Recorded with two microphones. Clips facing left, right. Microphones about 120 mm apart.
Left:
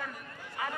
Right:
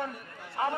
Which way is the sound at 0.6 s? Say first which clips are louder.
Right 7 dB; 40° right (ahead or behind).